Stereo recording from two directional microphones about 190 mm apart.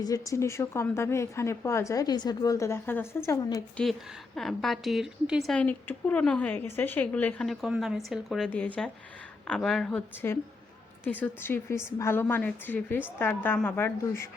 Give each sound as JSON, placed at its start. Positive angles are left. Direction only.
{"t": 0.0, "sound": "a woman's voice", "side_deg": 15}
{"t": 3.8, "sound": "a woman's voice", "side_deg": 5}